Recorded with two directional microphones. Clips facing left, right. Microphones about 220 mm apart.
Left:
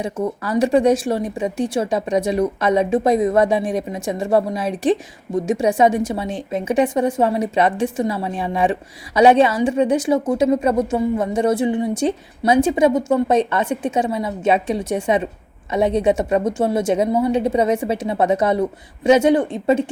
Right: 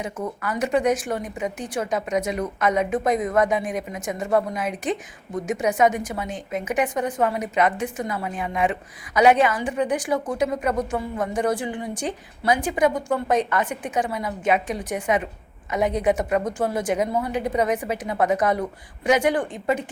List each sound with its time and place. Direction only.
0.0 s speech: 30° left (ahead or behind)